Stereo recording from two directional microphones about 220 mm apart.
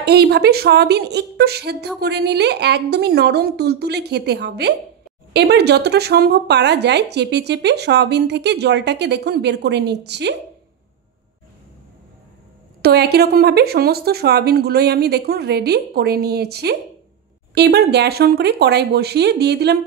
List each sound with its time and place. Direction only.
0.0 s speech: 50° right (ahead or behind)
12.8 s speech: 45° right (ahead or behind)